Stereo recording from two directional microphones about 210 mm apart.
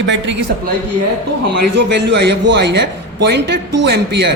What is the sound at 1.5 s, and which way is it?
A man's voice, 55° right (ahead or behind).